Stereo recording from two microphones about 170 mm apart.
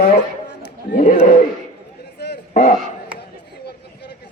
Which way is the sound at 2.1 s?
80° left.